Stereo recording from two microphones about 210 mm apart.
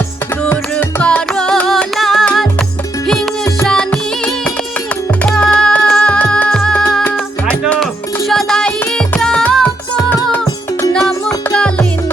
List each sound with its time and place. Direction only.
0.4 s music: 10° left (ahead or behind)
10.4 s music: 15° left (ahead or behind)